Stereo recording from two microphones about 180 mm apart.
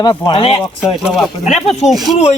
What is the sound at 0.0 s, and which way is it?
Speech, 25° left (ahead or behind).